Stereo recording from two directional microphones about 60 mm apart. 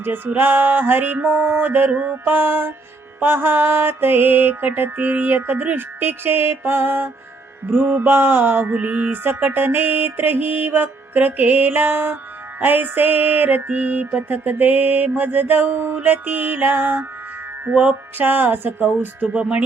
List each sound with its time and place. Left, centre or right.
0.0 s mantra: right
17.7 s speech: right